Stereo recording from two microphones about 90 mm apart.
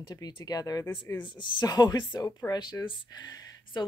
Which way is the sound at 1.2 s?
65° left (ahead or behind).